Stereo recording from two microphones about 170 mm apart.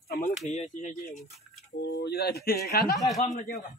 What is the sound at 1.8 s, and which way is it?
Speech, 75° left (ahead or behind).